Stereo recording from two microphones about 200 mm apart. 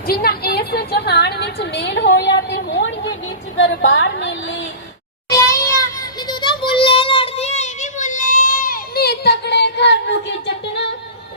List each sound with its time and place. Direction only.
0.1 s a woman's voice: 50° left (ahead or behind)
5.3 s child singing: 15° left (ahead or behind); by 10.5 s 60° left (ahead or behind)